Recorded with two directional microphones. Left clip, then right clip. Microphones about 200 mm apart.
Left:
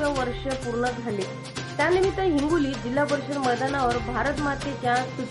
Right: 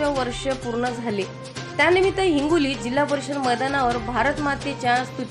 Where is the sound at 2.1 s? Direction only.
20° right (ahead or behind).